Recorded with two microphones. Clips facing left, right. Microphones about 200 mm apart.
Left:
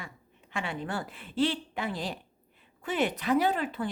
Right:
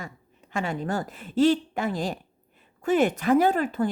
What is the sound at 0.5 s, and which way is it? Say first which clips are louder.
Speech: right 6 dB; 45° right (ahead or behind).